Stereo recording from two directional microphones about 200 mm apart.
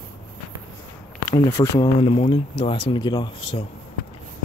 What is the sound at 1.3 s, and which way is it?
Speech, 10° left (ahead or behind).